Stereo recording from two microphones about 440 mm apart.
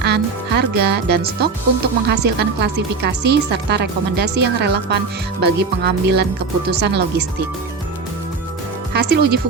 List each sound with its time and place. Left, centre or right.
0.0 s speech: right
8.9 s speech: right